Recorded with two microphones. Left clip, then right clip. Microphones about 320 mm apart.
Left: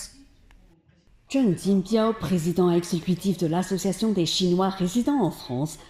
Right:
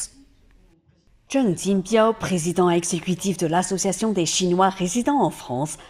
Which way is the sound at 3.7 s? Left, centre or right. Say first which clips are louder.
Right 3 dB; right.